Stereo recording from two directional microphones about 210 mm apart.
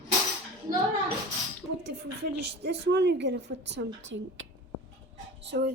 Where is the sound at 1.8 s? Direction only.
55° right (ahead or behind).